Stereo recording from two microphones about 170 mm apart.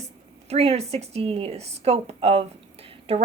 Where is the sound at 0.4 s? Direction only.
35° right (ahead or behind).